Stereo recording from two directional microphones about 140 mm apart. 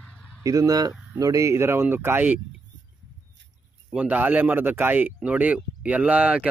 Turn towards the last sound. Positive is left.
turn(degrees=-10)  # may be behind; listen again after turning